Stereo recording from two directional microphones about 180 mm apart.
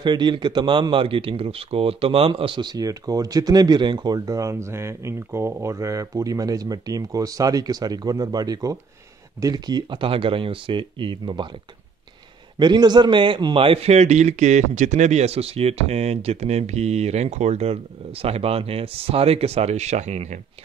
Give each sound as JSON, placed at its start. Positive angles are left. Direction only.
{"t": 0.0, "sound": "speech", "side_deg": -25}
{"t": 12.5, "sound": "a man's voice", "side_deg": -25}